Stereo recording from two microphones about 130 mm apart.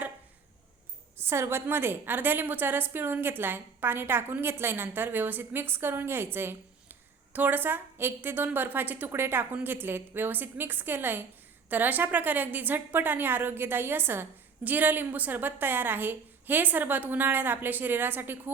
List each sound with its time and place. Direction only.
1.2 s a woman's voice: 20° right (ahead or behind)